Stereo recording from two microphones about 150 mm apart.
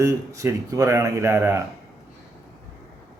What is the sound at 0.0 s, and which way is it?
Speech, 20° right (ahead or behind).